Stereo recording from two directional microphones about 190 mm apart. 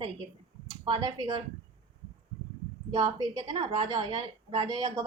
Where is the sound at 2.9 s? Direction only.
20° right (ahead or behind).